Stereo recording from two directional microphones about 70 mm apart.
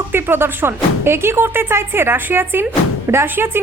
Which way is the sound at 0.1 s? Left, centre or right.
Right.